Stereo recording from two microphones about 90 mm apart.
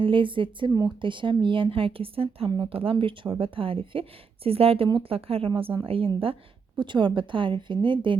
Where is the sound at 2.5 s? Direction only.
75° right (ahead or behind).